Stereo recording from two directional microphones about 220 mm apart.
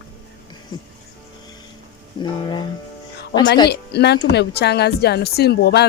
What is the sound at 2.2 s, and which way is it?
Speech, 20° left (ahead or behind).